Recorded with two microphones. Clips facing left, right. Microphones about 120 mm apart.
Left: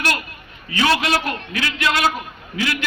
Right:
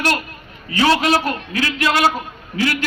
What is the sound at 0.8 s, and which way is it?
A man's voice, 35° right (ahead or behind).